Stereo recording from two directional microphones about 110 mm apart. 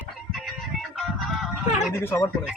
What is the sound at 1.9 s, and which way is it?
Speech, 25° left (ahead or behind).